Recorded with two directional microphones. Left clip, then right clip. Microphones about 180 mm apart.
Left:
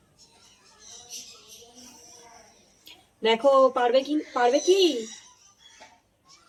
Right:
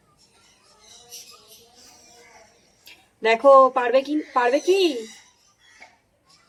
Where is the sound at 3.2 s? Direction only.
20° right (ahead or behind).